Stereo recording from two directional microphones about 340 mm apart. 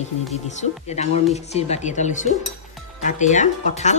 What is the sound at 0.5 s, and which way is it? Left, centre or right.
Speech, centre.